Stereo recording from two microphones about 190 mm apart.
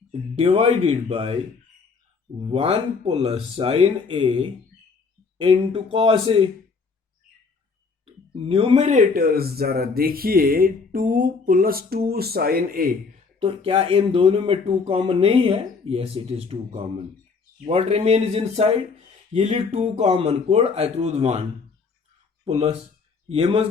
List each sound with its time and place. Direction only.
0.1 s speech: 30° right (ahead or behind)
2.4 s speech: 30° right (ahead or behind)
8.0 s speech: 30° right (ahead or behind); by 12.9 s 50° right (ahead or behind)
13.4 s speech: 30° right (ahead or behind)
22.4 s speech: 30° right (ahead or behind)